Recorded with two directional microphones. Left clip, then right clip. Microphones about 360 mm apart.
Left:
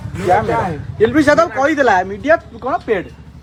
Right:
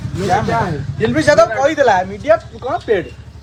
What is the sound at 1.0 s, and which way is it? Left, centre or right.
Speech, centre.